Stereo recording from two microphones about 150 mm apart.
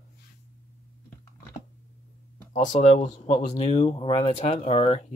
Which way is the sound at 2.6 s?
55° left (ahead or behind).